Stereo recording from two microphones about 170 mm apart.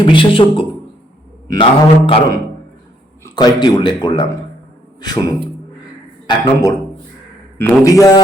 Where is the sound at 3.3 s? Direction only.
25° left (ahead or behind).